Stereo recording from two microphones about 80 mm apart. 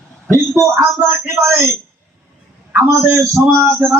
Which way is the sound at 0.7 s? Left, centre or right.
Right.